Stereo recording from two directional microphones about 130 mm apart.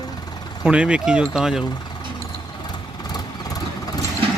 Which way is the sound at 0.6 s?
10° right (ahead or behind).